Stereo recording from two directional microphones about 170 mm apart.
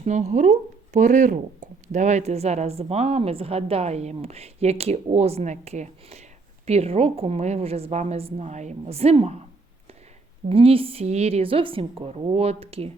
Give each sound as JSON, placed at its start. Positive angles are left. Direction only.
{"t": 0.0, "sound": "speech", "side_deg": -45}
{"t": 10.5, "sound": "speech", "side_deg": -35}